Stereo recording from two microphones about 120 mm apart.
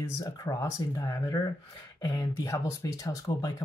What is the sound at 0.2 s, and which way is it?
Speech, 30° left (ahead or behind).